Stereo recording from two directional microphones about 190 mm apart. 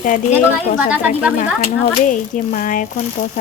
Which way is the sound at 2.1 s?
45° left (ahead or behind).